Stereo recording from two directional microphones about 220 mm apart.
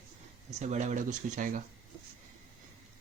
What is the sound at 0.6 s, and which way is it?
Speech, 30° right (ahead or behind).